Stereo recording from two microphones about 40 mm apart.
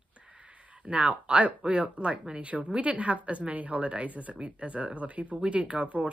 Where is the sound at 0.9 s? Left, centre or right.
Right.